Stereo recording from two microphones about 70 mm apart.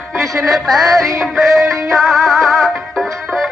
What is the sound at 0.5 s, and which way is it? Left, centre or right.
Music, centre.